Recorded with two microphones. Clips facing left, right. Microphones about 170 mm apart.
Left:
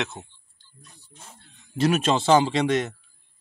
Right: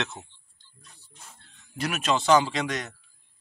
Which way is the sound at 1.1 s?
35° left (ahead or behind).